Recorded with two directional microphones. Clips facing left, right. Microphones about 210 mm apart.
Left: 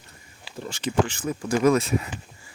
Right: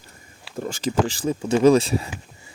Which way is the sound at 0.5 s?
45° right (ahead or behind).